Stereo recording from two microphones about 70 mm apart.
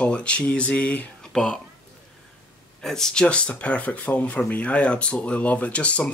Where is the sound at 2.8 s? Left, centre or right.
Centre.